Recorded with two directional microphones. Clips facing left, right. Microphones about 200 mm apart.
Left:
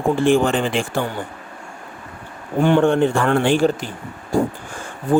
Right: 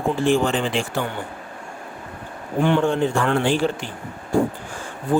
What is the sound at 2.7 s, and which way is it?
Speech, 60° left (ahead or behind).